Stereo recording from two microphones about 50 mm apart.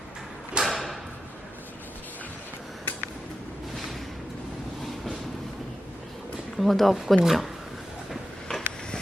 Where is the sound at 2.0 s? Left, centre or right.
Left.